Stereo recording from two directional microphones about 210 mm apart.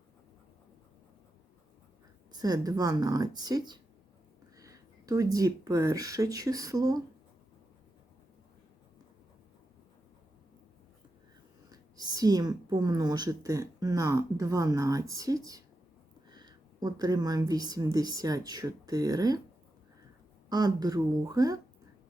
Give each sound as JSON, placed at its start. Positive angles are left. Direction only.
{"t": 2.3, "sound": "speech", "side_deg": -20}
{"t": 11.7, "sound": "a woman's voice", "side_deg": -20}
{"t": 20.5, "sound": "a woman's voice", "side_deg": -20}